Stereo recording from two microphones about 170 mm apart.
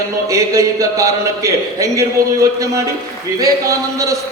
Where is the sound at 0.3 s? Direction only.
20° right (ahead or behind).